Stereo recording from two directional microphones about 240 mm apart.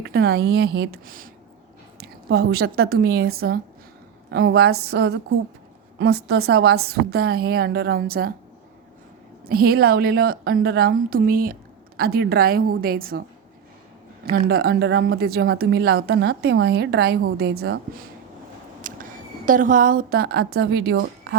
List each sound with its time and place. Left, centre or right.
0.0 s a woman's voice: right
9.5 s a woman's voice: right
14.3 s a woman's voice: right